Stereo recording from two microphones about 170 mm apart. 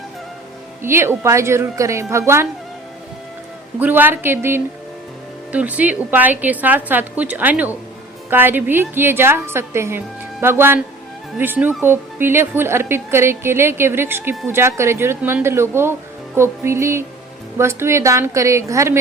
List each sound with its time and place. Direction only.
0.8 s a woman's voice: 15° right (ahead or behind)
3.8 s a woman's voice: 10° right (ahead or behind)